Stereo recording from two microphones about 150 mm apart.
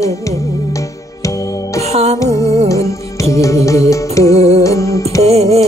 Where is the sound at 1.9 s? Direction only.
45° right (ahead or behind).